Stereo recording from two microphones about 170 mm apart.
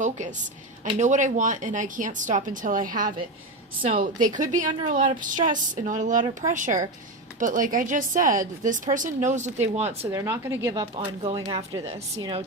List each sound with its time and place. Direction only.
0.0 s a woman's voice: 45° right (ahead or behind)
10.1 s a woman's voice: 15° right (ahead or behind)
10.9 s speech: 30° right (ahead or behind)